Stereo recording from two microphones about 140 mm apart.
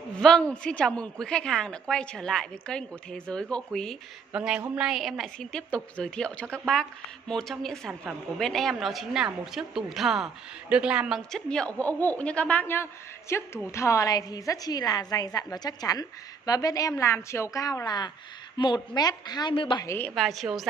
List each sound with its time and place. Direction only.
0.2 s a woman's voice: 5° left (ahead or behind)
4.3 s a woman's voice: 10° right (ahead or behind)
7.9 s a woman's voice: 15° right (ahead or behind)
8.4 s a woman's voice: 5° left (ahead or behind); by 19.9 s 35° left (ahead or behind)
20.2 s a woman's voice: centre (ahead or behind)